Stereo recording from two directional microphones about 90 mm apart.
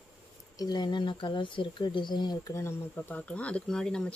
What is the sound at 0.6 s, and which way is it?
Speech, 50° left (ahead or behind).